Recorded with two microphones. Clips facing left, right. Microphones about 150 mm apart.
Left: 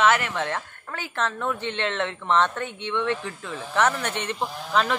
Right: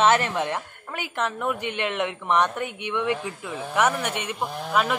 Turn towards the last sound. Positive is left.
turn(degrees=-10)  # may be behind; listen again after turning